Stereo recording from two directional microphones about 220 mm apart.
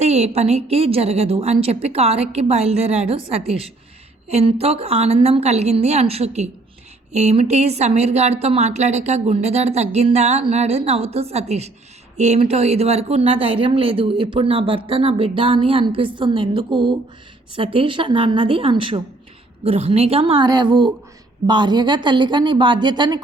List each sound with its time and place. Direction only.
0.0 s speech: 30° right (ahead or behind)